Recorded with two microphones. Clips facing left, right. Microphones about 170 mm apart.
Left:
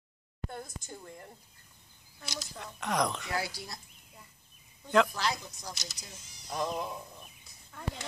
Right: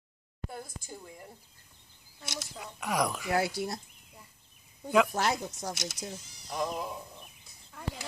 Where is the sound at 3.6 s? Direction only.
55° right (ahead or behind).